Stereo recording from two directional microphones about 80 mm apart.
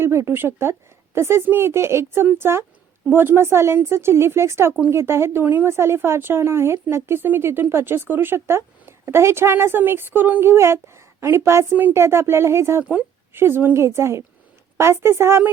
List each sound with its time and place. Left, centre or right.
0.0 s speech: right